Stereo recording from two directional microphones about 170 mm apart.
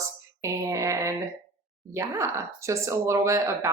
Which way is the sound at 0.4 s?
15° right (ahead or behind).